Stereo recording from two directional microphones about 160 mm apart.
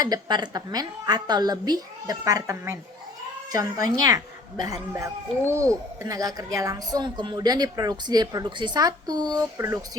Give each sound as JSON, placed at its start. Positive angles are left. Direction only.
{"t": 0.0, "sound": "a woman's voice", "side_deg": -25}